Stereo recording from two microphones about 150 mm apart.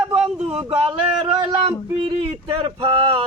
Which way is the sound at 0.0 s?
5° right (ahead or behind).